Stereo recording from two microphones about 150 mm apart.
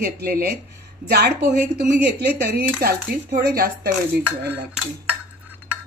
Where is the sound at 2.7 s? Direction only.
75° right (ahead or behind).